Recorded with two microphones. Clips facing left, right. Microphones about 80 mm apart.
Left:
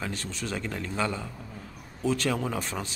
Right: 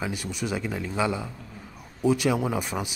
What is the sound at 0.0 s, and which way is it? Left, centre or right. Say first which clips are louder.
Speech: right 4 dB; centre.